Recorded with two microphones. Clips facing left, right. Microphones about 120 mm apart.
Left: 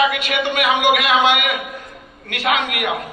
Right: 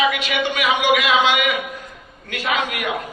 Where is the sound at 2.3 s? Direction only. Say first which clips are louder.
Left 3 dB; 70° left (ahead or behind).